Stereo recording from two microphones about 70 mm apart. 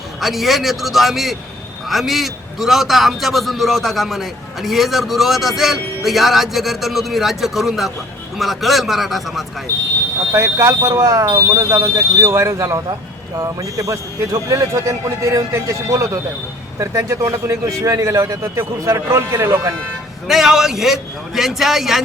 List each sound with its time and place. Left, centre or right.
0.2 s a man's voice: centre
10.3 s a man's voice: right
20.2 s a man's voice: centre